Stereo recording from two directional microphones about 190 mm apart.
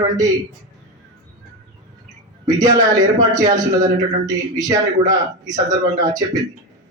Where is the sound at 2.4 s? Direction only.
20° right (ahead or behind).